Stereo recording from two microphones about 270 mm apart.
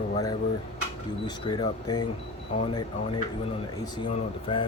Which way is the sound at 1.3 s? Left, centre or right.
Centre.